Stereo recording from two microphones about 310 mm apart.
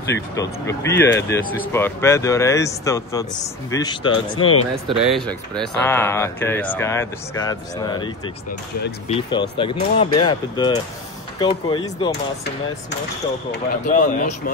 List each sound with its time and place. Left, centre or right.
0.4 s speech: centre
5.0 s speech: centre
9.1 s speech: centre
13.5 s speech: left